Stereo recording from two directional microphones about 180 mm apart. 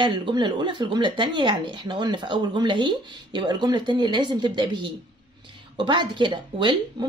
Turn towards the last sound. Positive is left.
turn(degrees=-25)  # may be behind; listen again after turning